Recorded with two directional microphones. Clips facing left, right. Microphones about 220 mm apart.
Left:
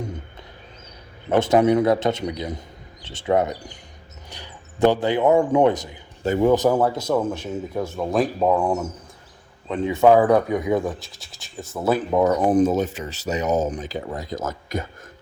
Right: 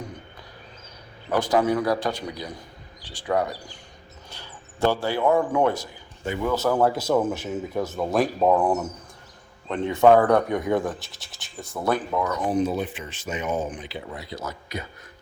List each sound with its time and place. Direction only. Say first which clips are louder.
1.3 s a man's voice: left 5 dB; 25° left (ahead or behind)
6.2 s a man's voice: left 8 dB; 40° left (ahead or behind)
6.5 s speech: left 3 dB; 15° left (ahead or behind)
6.8 s speech: even; 5° right (ahead or behind)
12.1 s a man's voice: left 8 dB; 30° left (ahead or behind)
12.5 s speech: left 6 dB; 50° left (ahead or behind)